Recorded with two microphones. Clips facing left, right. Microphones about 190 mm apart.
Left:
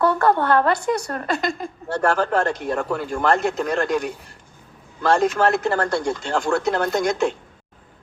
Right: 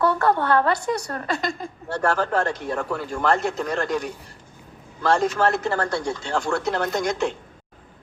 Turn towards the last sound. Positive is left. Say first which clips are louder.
# left 3 dB
turn(degrees=50)  # may be behind; listen again after turning